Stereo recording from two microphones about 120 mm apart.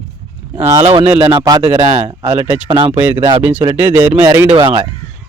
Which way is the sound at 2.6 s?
40° right (ahead or behind).